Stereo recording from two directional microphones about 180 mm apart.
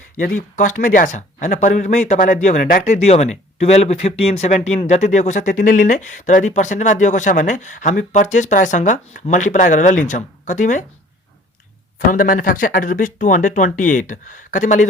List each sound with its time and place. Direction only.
0.2 s speech: 45° left (ahead or behind)
12.1 s speech: 50° left (ahead or behind)